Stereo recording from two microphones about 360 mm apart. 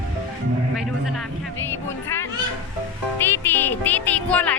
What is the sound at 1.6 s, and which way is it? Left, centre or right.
Music, centre.